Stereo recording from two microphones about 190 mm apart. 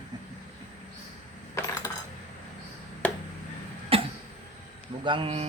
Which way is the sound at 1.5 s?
15° left (ahead or behind).